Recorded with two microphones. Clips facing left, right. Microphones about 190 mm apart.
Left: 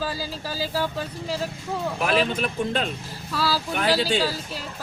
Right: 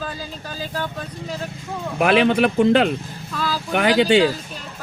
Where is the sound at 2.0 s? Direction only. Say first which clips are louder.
Right 9 dB; 70° right (ahead or behind).